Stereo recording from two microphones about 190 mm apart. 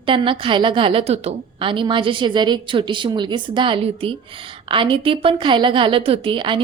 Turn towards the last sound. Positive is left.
turn(degrees=-25)  # may be behind; listen again after turning